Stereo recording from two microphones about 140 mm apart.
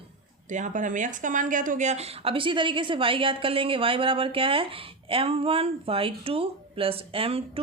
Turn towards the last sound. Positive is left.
turn(degrees=-45)  # may be behind; listen again after turning